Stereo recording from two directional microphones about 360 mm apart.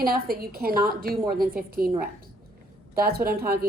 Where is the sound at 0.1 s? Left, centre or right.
Right.